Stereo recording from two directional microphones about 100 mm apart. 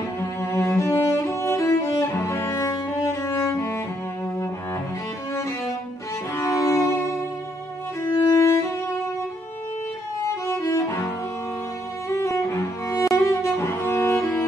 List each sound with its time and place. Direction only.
0.4 s cello: 30° left (ahead or behind)
6.3 s music: 35° left (ahead or behind)
8.0 s music: 30° left (ahead or behind)
10.4 s music: 30° left (ahead or behind)
12.2 s cello: 30° left (ahead or behind)